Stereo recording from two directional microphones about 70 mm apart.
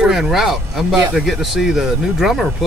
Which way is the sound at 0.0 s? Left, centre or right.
Centre.